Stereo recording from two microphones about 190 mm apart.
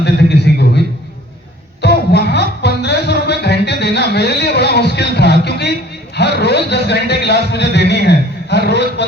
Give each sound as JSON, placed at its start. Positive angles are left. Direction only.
{"t": 0.0, "sound": "a sound", "side_deg": 65}
{"t": 1.8, "sound": "music", "side_deg": 60}
{"t": 6.1, "sound": "a man's voice", "side_deg": 60}